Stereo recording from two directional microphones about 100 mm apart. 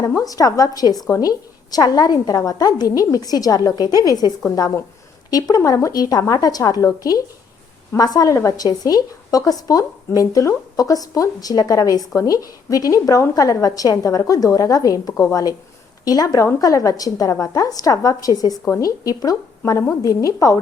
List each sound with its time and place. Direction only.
0.2 s speech: 35° left (ahead or behind)